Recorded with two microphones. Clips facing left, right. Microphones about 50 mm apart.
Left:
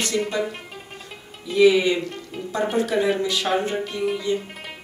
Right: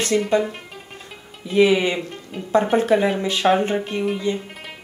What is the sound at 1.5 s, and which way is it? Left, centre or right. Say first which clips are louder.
A woman's voice: even; right.